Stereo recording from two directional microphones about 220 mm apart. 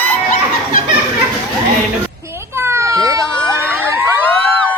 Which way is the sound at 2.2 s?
10° right (ahead or behind).